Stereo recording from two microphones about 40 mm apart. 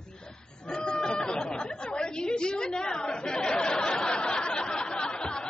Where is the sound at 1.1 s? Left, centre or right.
Left.